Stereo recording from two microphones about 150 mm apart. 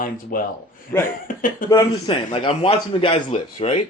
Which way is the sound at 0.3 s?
70° left (ahead or behind).